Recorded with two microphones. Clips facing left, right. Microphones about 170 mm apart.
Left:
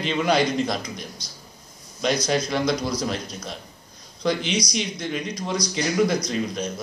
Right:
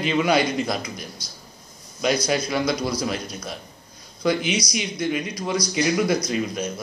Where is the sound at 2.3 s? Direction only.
5° right (ahead or behind).